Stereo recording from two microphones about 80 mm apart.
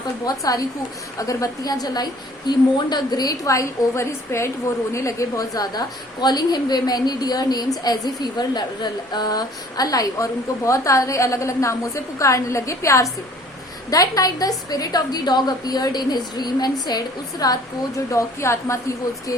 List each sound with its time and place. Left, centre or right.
0.3 s a woman's voice: left
13.9 s a woman's voice: left
17.4 s a woman's voice: left